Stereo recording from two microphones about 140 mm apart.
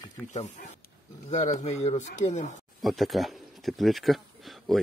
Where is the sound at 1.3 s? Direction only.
60° left (ahead or behind).